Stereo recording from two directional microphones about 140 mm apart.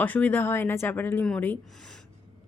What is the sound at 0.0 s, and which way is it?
A woman's voice, 10° left (ahead or behind).